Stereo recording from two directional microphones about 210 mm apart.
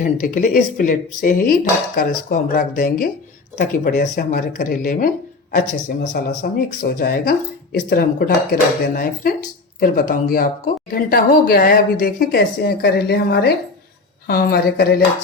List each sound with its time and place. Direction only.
0.0 s speech: 40° left (ahead or behind)